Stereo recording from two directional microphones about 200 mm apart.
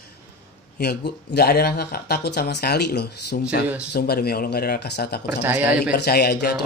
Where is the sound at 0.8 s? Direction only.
55° left (ahead or behind).